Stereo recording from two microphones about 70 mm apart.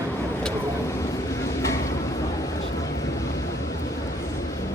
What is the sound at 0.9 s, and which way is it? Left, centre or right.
Vehicle, left.